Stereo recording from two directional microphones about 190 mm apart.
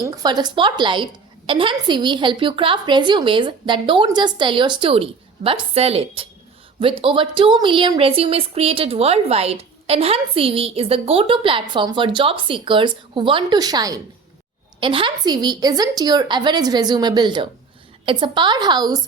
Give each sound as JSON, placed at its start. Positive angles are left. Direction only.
{"t": 0.0, "sound": "speech", "side_deg": -20}